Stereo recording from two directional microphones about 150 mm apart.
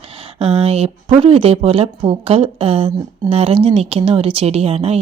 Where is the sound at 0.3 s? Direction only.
40° right (ahead or behind).